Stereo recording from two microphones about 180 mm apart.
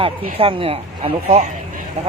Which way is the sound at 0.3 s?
30° right (ahead or behind).